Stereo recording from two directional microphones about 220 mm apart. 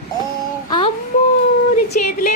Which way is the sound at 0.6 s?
20° left (ahead or behind).